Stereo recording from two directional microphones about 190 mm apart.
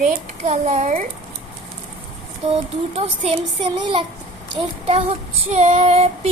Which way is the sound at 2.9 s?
30° right (ahead or behind).